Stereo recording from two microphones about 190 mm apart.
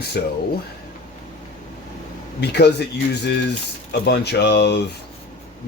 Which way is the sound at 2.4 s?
60° left (ahead or behind).